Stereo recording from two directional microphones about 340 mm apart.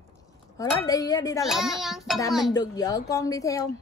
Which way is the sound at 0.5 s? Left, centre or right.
Centre.